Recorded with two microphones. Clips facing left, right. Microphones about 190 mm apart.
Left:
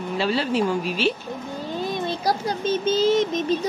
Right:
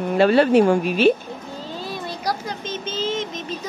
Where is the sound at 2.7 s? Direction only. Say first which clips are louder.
Left 7 dB; 40° left (ahead or behind).